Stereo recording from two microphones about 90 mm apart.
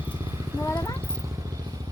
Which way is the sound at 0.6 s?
30° left (ahead or behind).